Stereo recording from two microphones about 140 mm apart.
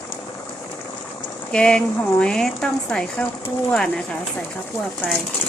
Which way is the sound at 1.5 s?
5° left (ahead or behind).